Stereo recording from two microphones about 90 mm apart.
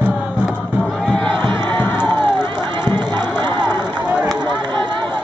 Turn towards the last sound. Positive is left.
turn(degrees=-50)  # may be behind; listen again after turning